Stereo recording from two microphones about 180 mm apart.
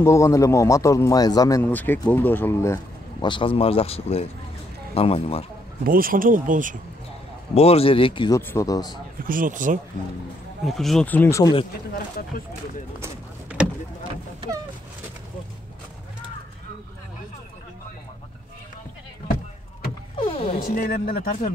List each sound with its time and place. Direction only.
0.0 s speech: 15° left (ahead or behind)
1.6 s speech: 10° left (ahead or behind)
3.3 s speech: 30° left (ahead or behind)
5.9 s speech: 50° right (ahead or behind)
7.5 s speech: 35° left (ahead or behind)
8.4 s speech: 15° left (ahead or behind)
9.2 s speech: 50° right (ahead or behind)
10.6 s speech: centre (ahead or behind)
11.9 s speech: 55° left (ahead or behind)
13.0 s a sound: 10° right (ahead or behind)
20.2 s music: 30° left (ahead or behind)
20.6 s speech: 55° left (ahead or behind)